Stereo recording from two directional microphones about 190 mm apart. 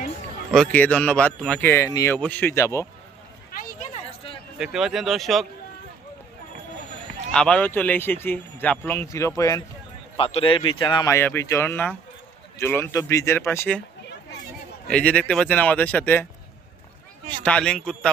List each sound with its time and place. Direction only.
0.5 s speech: 5° left (ahead or behind)
3.5 s a sound: 50° left (ahead or behind)
3.9 s a sound: 30° left (ahead or behind)
4.5 s speech: 5° right (ahead or behind)
7.3 s speech: 5° left (ahead or behind)
10.2 s speech: 30° left (ahead or behind); by 13.8 s 10° left (ahead or behind)
14.8 s speech: 5° left (ahead or behind)
17.4 s speech: 5° left (ahead or behind)